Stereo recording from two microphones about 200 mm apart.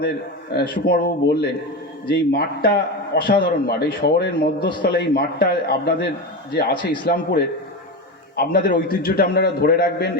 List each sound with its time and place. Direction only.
0.5 s a man's voice: 55° left (ahead or behind)